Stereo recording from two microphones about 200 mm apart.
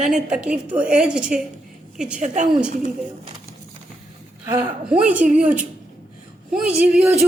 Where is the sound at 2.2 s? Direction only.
35° right (ahead or behind).